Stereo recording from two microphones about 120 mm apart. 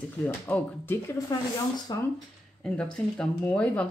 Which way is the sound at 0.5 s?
20° left (ahead or behind).